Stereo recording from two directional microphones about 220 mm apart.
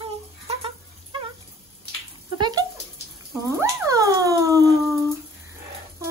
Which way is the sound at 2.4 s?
20° right (ahead or behind).